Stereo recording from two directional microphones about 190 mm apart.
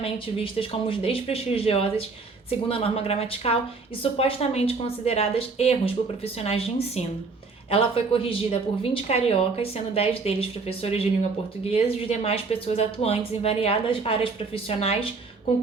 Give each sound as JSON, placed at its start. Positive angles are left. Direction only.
{"t": 0.0, "sound": "a woman's voice", "side_deg": 30}